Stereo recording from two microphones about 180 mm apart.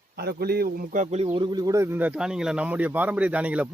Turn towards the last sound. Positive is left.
turn(degrees=-10)  # may be behind; listen again after turning